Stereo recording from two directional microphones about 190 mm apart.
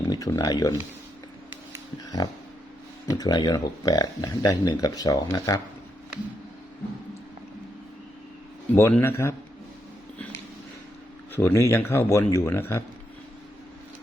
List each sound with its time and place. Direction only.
0.0 s speech: 20° left (ahead or behind)
2.0 s a sound: 20° left (ahead or behind)
3.2 s speech: 20° left (ahead or behind)
8.7 s speech: 15° left (ahead or behind)
11.3 s speech: 15° left (ahead or behind)